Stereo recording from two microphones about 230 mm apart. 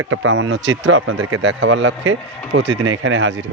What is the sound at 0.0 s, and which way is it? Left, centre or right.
Speech, right.